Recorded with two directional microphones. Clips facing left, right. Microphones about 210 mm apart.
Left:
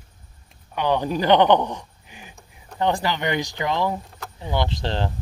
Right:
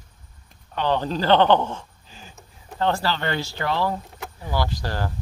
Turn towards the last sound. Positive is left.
turn(degrees=25)  # may be behind; listen again after turning